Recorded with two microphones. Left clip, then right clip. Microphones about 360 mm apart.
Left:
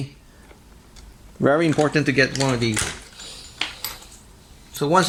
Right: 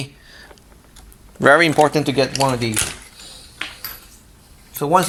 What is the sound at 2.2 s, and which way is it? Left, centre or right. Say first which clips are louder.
Speech: right 3 dB; centre.